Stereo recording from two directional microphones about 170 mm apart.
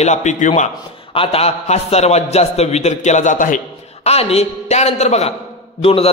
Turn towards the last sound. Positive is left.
turn(degrees=35)  # may be behind; listen again after turning